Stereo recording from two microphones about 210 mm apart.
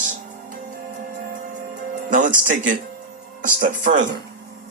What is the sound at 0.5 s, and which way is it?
Music, 40° right (ahead or behind).